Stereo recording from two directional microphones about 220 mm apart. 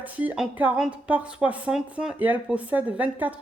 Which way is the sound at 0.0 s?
5° right (ahead or behind).